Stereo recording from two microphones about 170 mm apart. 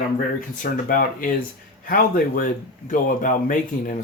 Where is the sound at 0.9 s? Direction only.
55° left (ahead or behind).